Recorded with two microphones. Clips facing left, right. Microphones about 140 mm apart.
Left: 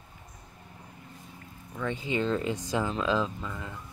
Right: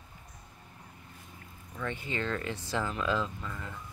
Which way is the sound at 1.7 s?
15° left (ahead or behind).